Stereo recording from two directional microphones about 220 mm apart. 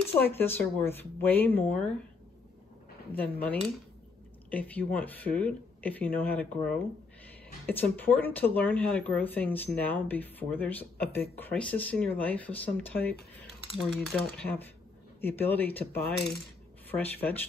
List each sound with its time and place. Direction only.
0.3 s speech: 10° left (ahead or behind)
3.1 s speech: 10° left (ahead or behind)
7.6 s speech: 10° left (ahead or behind)
16.9 s speech: 10° left (ahead or behind)